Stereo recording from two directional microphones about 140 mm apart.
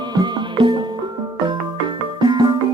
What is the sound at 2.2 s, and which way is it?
Music, 30° right (ahead or behind).